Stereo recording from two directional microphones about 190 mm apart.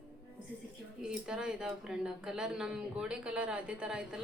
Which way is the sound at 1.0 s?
5° right (ahead or behind).